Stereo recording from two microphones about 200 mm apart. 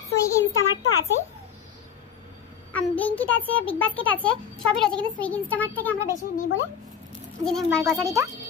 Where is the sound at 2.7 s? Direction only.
10° left (ahead or behind).